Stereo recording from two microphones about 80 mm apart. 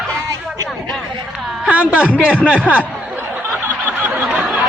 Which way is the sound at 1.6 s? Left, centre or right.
Centre.